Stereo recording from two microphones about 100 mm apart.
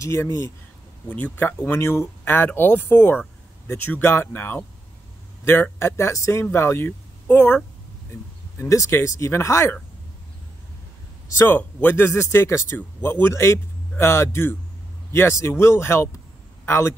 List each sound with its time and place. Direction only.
0.0 s speech: 30° left (ahead or behind)
1.0 s speech: 15° left (ahead or behind)
11.3 s speech: 20° left (ahead or behind)